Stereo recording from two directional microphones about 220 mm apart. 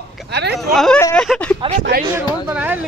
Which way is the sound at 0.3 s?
50° right (ahead or behind).